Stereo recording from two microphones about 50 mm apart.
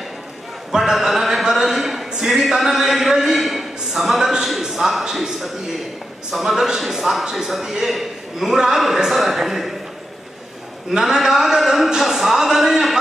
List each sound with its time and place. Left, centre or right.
0.7 s a man's voice: centre
10.9 s speech: centre